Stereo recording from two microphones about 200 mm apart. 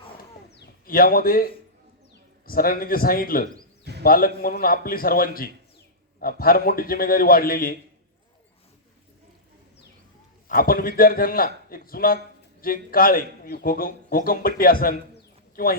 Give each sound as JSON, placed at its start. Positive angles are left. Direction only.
{"t": 0.5, "sound": "a sound", "side_deg": 45}
{"t": 2.5, "sound": "a man's voice", "side_deg": 45}
{"t": 10.5, "sound": "a man's voice", "side_deg": 45}